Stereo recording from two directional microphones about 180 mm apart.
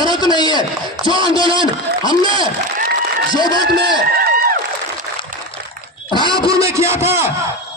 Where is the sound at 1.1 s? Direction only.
25° right (ahead or behind).